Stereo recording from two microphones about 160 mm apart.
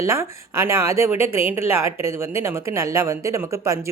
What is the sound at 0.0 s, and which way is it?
Speech, 15° right (ahead or behind).